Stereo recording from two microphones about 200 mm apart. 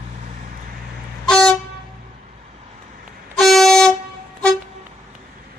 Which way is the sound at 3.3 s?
Centre (ahead or behind).